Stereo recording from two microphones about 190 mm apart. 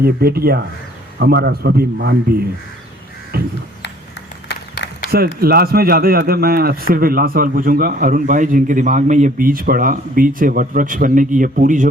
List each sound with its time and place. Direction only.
0.0 s a man's voice: 55° right (ahead or behind)
3.3 s speech: 55° right (ahead or behind)
4.4 s a sound: 60° left (ahead or behind)
5.1 s speech: 55° right (ahead or behind)